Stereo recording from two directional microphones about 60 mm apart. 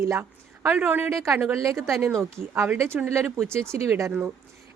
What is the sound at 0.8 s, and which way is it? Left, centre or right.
Speech, right.